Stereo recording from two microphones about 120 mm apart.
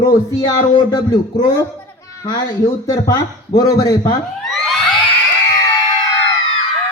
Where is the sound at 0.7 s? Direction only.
40° left (ahead or behind).